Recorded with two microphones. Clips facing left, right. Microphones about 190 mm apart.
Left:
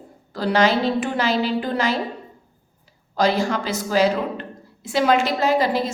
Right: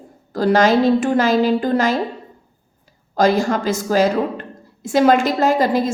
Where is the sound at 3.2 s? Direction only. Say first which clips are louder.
Right 4 dB; 45° right (ahead or behind).